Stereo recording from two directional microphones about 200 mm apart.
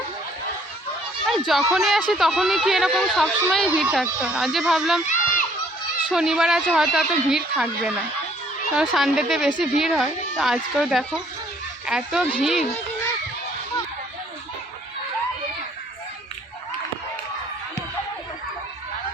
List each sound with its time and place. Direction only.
1.3 s speech: centre (ahead or behind)
5.0 s children playing: 40° left (ahead or behind)
6.1 s speech: 5° right (ahead or behind)